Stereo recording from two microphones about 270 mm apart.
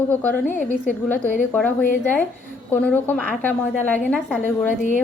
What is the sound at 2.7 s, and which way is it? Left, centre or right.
A woman's voice, centre.